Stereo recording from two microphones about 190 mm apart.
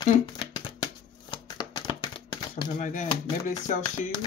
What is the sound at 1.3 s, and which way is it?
Typewriter, 25° left (ahead or behind).